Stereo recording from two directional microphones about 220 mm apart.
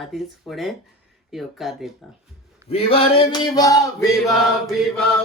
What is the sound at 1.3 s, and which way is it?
Chant, centre (ahead or behind).